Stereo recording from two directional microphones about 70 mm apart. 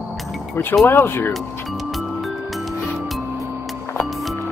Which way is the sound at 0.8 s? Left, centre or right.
Left.